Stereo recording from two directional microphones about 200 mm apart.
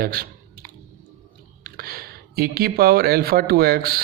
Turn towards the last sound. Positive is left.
turn(degrees=-50)  # may be behind; listen again after turning